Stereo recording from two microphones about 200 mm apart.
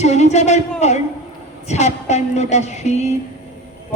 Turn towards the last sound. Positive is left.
turn(degrees=35)  # may be behind; listen again after turning